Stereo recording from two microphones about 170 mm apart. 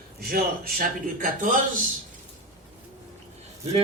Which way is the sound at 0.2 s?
60° right (ahead or behind).